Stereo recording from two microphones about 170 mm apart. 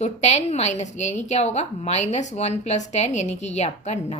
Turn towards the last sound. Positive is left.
turn(degrees=40)  # may be behind; listen again after turning